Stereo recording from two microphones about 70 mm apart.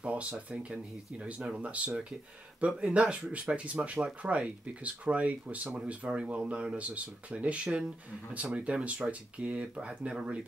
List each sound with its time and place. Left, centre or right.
0.0 s speech: centre